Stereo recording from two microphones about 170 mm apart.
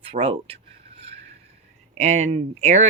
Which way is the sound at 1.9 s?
40° right (ahead or behind).